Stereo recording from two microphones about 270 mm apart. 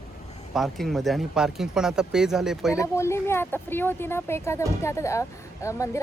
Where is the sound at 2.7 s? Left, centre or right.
Centre.